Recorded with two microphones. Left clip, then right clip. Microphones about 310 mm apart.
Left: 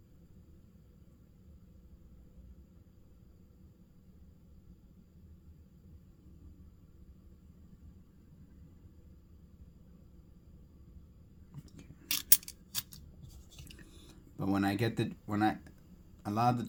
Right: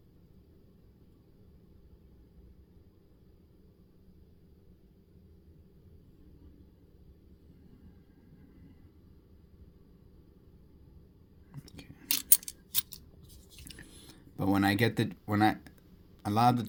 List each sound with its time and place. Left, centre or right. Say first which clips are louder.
11.6 s whispering: right 7 dB; right
12.0 s scissors: right 1 dB; centre
13.7 s a sound: right 7 dB; right
16.2 s a man's voice: right 5 dB; right